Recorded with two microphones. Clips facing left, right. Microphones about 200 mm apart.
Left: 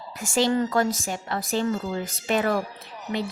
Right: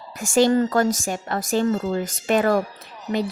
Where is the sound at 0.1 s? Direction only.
45° right (ahead or behind).